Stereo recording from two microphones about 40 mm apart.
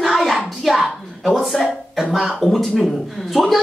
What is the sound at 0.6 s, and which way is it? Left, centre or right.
Speech, centre.